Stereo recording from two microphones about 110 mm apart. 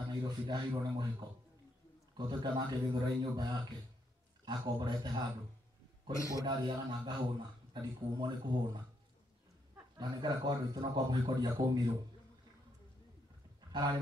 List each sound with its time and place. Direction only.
0.1 s speech: 40° right (ahead or behind)
2.1 s a man's voice: 40° right (ahead or behind)
4.5 s speech: 40° right (ahead or behind)
6.1 s a man's voice: 30° left (ahead or behind)
6.4 s speech: 40° right (ahead or behind)
9.9 s a man's voice: 40° right (ahead or behind)
13.7 s a sound: 40° right (ahead or behind)